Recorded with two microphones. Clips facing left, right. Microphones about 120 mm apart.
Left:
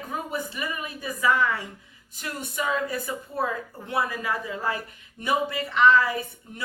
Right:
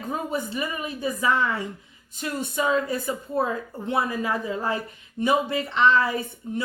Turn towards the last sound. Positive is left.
turn(degrees=-25)  # may be behind; listen again after turning